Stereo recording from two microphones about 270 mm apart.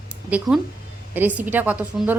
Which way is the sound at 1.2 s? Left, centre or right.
Centre.